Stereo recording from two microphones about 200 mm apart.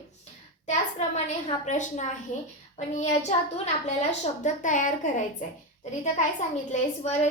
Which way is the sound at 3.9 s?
35° left (ahead or behind).